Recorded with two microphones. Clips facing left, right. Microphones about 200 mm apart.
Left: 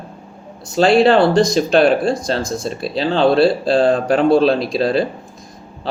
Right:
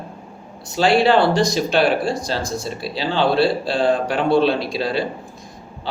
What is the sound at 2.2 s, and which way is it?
Speech, 45° left (ahead or behind).